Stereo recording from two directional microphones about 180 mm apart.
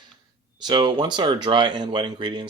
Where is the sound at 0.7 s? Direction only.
25° right (ahead or behind).